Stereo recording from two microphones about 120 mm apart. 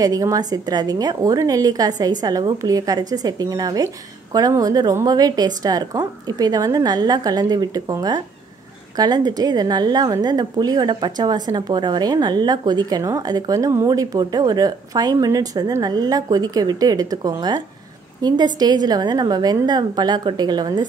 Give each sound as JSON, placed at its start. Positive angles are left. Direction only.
{"t": 0.0, "sound": "a woman's voice", "side_deg": -30}